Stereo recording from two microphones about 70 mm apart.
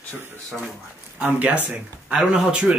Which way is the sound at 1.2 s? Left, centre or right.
Right.